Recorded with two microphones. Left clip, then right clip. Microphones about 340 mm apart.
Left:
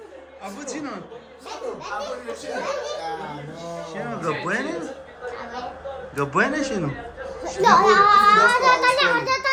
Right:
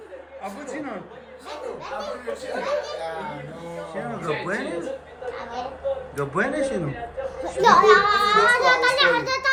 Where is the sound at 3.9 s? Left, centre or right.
Centre.